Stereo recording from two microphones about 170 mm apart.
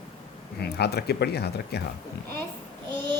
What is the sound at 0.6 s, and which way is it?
Speech, 70° left (ahead or behind).